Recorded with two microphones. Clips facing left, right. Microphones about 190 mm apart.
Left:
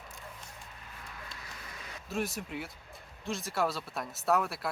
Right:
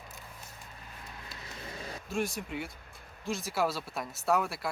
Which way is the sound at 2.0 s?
Centre (ahead or behind).